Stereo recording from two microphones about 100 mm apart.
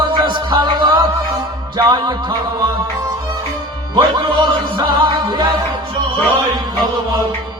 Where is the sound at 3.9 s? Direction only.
55° right (ahead or behind).